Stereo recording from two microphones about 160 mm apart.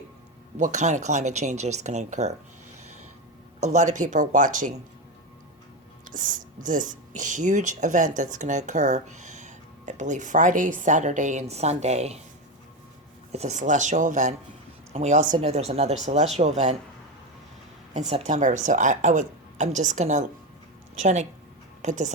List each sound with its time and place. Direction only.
0.6 s speech: 50° right (ahead or behind)
3.6 s speech: 45° right (ahead or behind)
6.1 s speech: 55° right (ahead or behind)
13.3 s speech: 45° right (ahead or behind)
17.9 s speech: 45° right (ahead or behind)